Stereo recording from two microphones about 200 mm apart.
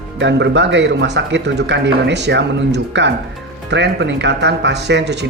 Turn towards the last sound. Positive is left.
turn(degrees=-60)  # may be behind; listen again after turning